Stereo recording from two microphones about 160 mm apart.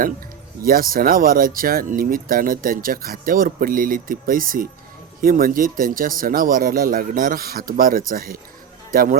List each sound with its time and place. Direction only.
0.6 s speech: 65° right (ahead or behind)